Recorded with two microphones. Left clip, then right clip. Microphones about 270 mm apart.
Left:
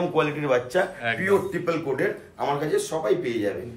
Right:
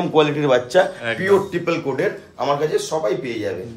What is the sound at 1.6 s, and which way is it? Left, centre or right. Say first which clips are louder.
Speech: right 4 dB; right.